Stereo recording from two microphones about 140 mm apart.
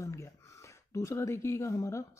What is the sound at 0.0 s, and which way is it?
Speech, 20° left (ahead or behind).